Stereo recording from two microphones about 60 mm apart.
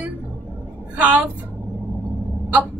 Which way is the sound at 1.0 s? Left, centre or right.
Right.